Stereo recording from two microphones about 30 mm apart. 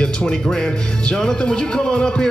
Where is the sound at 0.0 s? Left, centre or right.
Left.